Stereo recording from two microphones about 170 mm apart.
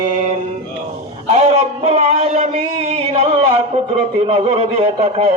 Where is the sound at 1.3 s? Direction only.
40° right (ahead or behind).